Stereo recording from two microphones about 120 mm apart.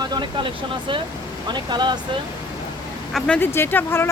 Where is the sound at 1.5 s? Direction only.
40° right (ahead or behind).